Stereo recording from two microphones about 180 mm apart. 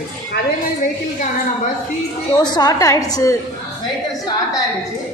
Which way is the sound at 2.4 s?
20° left (ahead or behind).